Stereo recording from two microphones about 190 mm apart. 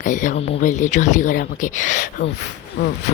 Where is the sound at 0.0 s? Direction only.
40° left (ahead or behind).